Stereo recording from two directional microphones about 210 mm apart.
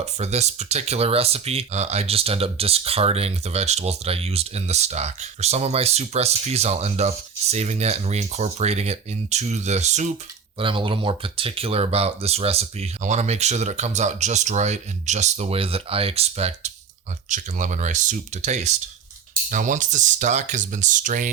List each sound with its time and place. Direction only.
0.0 s speech: 30° right (ahead or behind)